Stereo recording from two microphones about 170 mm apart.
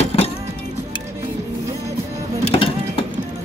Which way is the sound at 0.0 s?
35° left (ahead or behind).